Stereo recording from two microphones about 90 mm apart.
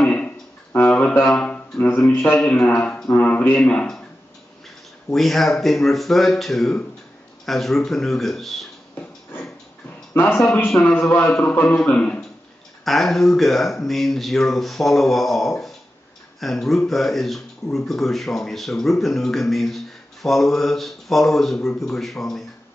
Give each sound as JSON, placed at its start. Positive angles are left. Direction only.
{"t": 0.0, "sound": "a sound", "side_deg": 15}
{"t": 0.7, "sound": "speech", "side_deg": 20}
{"t": 2.0, "sound": "a man's voice", "side_deg": 25}
{"t": 2.4, "sound": "speech", "side_deg": 10}
{"t": 5.1, "sound": "speech", "side_deg": 0}
{"t": 10.8, "sound": "a man's voice", "side_deg": 20}